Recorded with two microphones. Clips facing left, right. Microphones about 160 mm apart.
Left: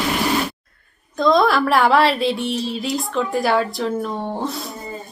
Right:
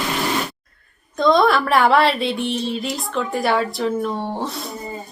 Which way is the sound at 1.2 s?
Centre (ahead or behind).